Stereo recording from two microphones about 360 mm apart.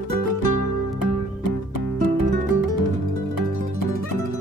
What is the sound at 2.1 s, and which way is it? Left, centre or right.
Music, left.